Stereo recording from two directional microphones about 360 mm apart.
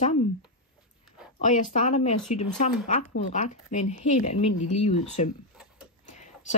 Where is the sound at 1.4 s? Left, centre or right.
Left.